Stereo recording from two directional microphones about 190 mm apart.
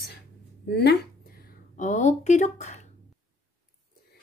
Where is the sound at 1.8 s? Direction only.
40° left (ahead or behind).